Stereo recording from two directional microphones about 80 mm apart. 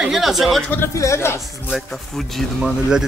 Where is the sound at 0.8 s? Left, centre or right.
Left.